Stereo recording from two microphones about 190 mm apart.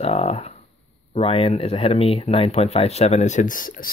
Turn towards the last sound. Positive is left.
turn(degrees=45)  # may be behind; listen again after turning